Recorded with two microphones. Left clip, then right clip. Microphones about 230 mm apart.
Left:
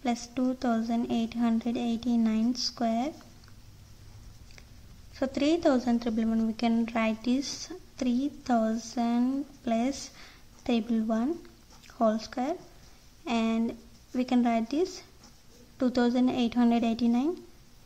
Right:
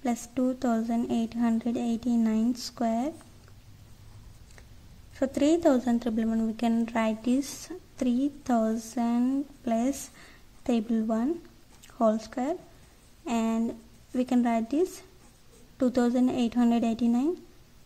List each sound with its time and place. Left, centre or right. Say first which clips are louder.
0.0 s a woman's voice: right 1 dB; centre
5.1 s a woman's voice: right 2 dB; centre